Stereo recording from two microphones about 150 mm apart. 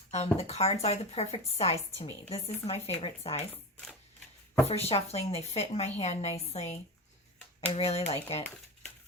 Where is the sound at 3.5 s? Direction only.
5° left (ahead or behind).